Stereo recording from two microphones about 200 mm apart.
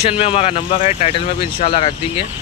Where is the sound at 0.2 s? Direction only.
30° left (ahead or behind).